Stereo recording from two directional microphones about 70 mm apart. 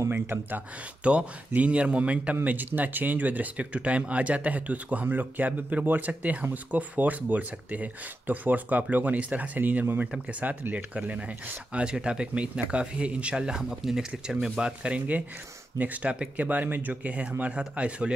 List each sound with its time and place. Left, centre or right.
0.1 s speech: right
1.0 s speech: centre